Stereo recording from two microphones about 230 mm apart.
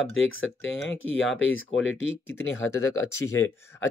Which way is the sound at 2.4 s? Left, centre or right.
Left.